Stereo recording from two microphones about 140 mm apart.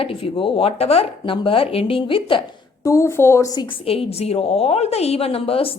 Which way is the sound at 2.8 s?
20° left (ahead or behind).